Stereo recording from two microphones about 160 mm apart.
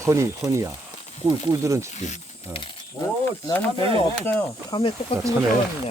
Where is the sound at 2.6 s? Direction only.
25° left (ahead or behind).